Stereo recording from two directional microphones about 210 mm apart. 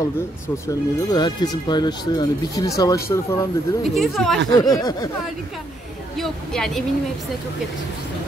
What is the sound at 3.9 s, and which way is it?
Speech, centre (ahead or behind).